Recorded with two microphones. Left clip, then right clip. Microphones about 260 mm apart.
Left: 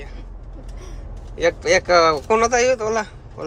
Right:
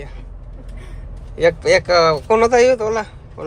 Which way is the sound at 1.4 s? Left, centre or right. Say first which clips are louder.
Right 3 dB; centre.